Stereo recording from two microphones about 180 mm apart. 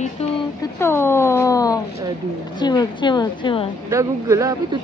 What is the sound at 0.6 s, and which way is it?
A woman's voice, 15° left (ahead or behind).